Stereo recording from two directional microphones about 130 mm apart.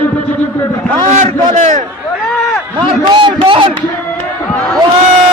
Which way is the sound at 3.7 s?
15° left (ahead or behind).